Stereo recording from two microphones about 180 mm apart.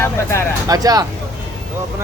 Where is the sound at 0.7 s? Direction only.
20° right (ahead or behind).